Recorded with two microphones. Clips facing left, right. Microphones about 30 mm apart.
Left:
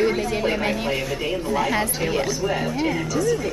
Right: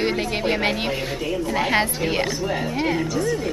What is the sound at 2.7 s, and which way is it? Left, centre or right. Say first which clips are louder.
Speech: right 1 dB; right.